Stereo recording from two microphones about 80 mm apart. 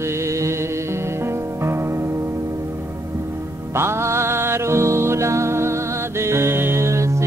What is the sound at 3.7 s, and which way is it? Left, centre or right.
Music, right.